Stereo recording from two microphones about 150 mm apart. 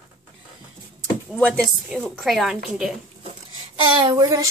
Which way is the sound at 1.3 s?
5° left (ahead or behind).